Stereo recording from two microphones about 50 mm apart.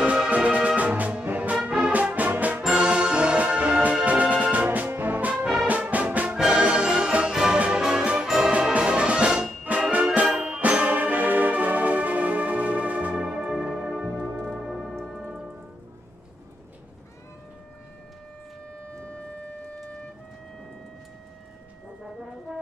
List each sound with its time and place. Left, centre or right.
0.0 s music: right
1.6 s music: centre
1.9 s music: right
2.7 s music: centre
4.6 s music: right
5.3 s music: centre
5.7 s music: right
6.3 s music: centre
9.7 s music: right
10.2 s music: centre
13.5 s music: centre